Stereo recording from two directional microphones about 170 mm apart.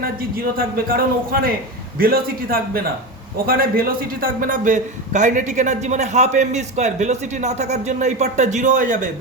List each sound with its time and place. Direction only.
0.3 s a man's voice: 60° right (ahead or behind)